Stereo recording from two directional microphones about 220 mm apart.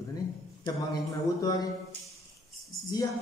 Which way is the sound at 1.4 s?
15° left (ahead or behind).